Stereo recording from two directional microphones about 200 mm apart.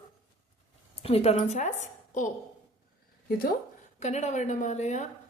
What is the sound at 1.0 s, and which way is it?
Speech, 30° left (ahead or behind).